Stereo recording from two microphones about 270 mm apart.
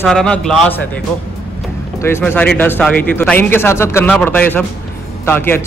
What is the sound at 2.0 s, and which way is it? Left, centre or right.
Speech, centre.